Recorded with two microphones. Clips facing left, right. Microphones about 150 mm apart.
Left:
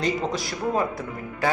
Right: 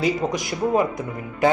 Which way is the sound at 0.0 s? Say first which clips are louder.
Right 3 dB; 15° right (ahead or behind).